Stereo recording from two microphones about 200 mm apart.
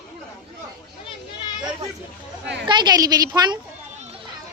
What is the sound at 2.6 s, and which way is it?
Speech, 20° right (ahead or behind).